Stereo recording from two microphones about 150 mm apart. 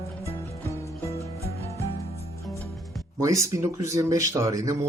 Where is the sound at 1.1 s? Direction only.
20° right (ahead or behind).